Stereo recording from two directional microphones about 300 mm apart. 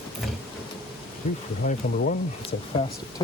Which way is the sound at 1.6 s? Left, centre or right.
Left.